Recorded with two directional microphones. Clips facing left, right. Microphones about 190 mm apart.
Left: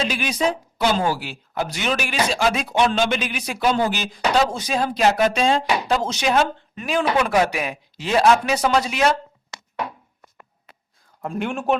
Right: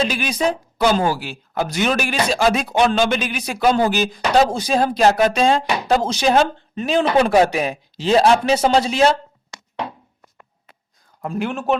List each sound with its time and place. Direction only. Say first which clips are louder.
0.1 s a man's voice: right 2 dB; 40° right (ahead or behind)
11.2 s a man's voice: right 2 dB; 5° right (ahead or behind)